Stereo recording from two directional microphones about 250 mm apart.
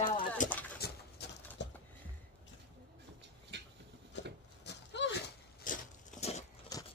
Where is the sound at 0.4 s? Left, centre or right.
Left.